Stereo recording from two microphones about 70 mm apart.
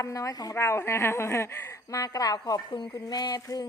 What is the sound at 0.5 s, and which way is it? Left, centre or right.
A woman's voice, left.